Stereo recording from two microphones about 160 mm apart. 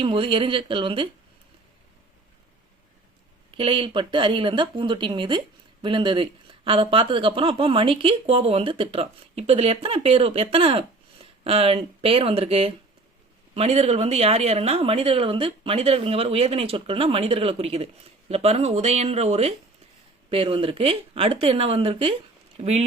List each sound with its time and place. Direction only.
0.0 s a woman's voice: 35° right (ahead or behind)
3.6 s a woman's voice: 35° right (ahead or behind)